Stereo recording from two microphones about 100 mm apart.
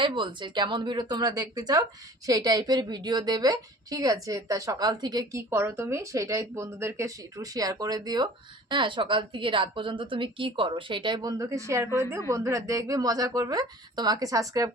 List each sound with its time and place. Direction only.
0.0 s a woman's voice: 55° right (ahead or behind)
5.3 s a woman's voice: 25° right (ahead or behind)
8.7 s a woman's voice: 55° right (ahead or behind)
11.2 s a woman's voice: 35° right (ahead or behind)